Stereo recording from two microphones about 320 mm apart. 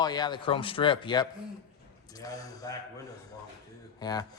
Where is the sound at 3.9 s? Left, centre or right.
Centre.